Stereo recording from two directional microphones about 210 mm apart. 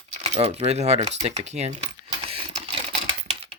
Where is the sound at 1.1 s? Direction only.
30° right (ahead or behind).